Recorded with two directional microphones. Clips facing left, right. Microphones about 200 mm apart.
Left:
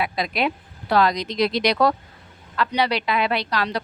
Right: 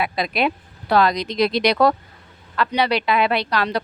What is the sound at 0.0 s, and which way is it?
A woman's voice, 60° right (ahead or behind).